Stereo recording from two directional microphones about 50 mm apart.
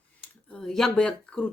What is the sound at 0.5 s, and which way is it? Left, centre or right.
Speech, centre.